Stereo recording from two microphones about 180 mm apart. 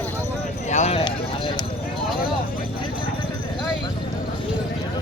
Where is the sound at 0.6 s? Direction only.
40° left (ahead or behind).